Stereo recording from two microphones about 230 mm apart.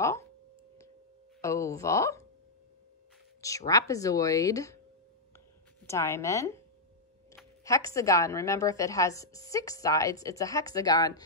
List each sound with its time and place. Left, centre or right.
1.4 s a woman's voice: centre
3.3 s a woman's voice: centre
5.9 s a woman's voice: centre
7.6 s a woman's voice: centre